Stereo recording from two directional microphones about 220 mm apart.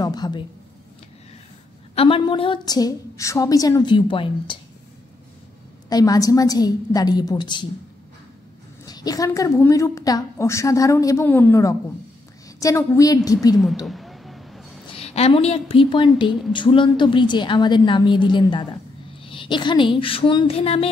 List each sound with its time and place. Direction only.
0.0 s a sound: 20° left (ahead or behind)
2.0 s a woman's voice: 25° left (ahead or behind)
5.9 s a woman's voice: 15° left (ahead or behind)
8.8 s a woman's voice: 15° left (ahead or behind)
13.8 s a sound: centre (ahead or behind)
15.0 s a woman's voice: 30° left (ahead or behind)
16.3 s speech: centre (ahead or behind)
16.5 s a woman's voice: 20° left (ahead or behind)